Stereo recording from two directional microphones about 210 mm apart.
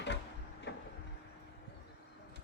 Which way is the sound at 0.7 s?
55° left (ahead or behind).